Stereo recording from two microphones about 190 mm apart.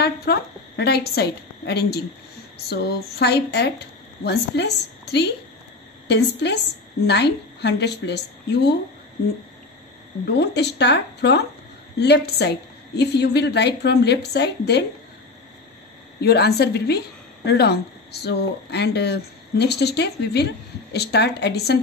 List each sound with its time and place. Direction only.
0.0 s a woman's voice: 55° left (ahead or behind)
10.2 s speech: 60° left (ahead or behind)
16.2 s speech: 60° left (ahead or behind)